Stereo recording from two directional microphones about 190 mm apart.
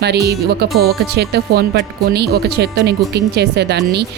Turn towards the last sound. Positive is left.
turn(degrees=-60)  # may be behind; listen again after turning